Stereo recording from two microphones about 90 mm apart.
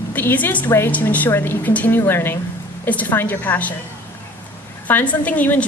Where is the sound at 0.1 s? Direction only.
20° left (ahead or behind).